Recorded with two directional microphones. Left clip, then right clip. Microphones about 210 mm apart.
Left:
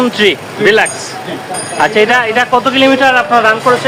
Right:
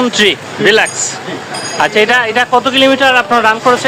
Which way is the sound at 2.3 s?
30° right (ahead or behind).